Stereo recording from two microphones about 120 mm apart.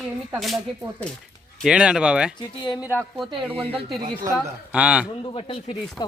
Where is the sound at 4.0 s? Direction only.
40° right (ahead or behind).